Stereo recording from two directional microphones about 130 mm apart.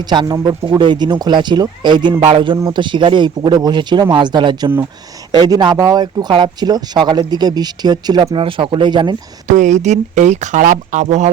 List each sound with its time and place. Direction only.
0.0 s speech: 35° right (ahead or behind)
8.4 s speech: 45° right (ahead or behind)
9.5 s speech: 70° right (ahead or behind)